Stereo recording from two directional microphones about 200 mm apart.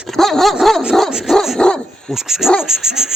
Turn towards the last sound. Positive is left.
turn(degrees=0)  # may be behind; listen again after turning